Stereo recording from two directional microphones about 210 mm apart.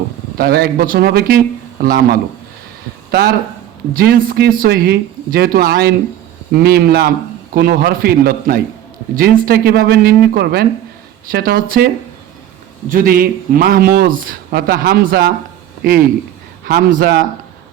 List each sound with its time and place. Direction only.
0.3 s a man's voice: 50° right (ahead or behind)
12.9 s a man's voice: 40° right (ahead or behind)